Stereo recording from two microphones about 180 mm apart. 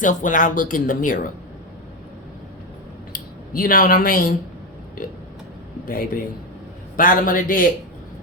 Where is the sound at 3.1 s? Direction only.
50° left (ahead or behind).